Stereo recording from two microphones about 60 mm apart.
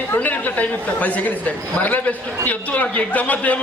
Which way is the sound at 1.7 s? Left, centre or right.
Left.